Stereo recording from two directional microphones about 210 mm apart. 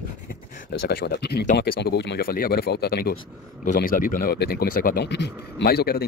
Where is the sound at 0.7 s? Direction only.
50° left (ahead or behind).